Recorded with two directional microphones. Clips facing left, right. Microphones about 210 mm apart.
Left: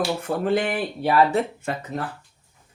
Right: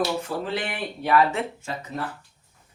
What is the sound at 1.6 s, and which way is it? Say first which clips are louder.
Speech: left 4 dB; 60° left (ahead or behind).